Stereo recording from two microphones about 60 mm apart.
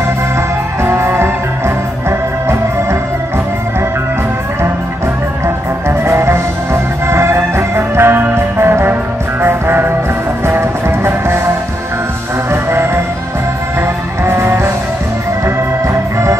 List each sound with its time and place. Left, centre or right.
0.8 s music: right
5.9 s music: right